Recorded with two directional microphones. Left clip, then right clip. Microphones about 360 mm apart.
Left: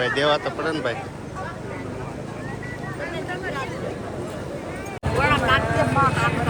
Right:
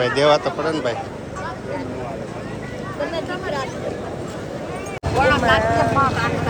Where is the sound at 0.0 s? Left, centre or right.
Centre.